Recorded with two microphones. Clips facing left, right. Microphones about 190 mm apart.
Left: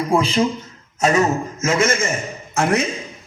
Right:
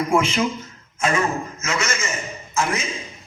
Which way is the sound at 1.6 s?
50° left (ahead or behind).